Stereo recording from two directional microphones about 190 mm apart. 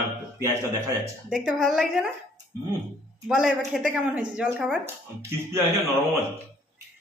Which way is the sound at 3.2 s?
5° right (ahead or behind).